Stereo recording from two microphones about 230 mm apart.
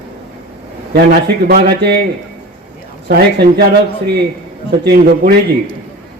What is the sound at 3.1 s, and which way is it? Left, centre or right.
Speech, right.